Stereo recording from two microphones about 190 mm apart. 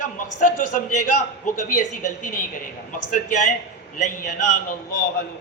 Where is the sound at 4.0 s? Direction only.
40° left (ahead or behind).